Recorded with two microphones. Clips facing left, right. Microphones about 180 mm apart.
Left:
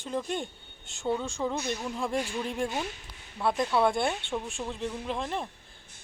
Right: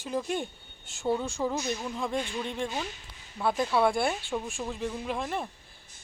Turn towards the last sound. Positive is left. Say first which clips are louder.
# even
turn(degrees=-5)  # may be behind; listen again after turning